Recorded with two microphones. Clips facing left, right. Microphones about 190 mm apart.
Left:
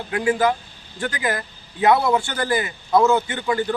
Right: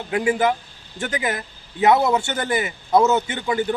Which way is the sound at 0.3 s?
20° right (ahead or behind).